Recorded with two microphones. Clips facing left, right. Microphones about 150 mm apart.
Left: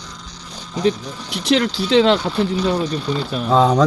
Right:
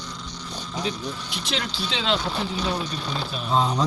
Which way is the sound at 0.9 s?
70° left (ahead or behind).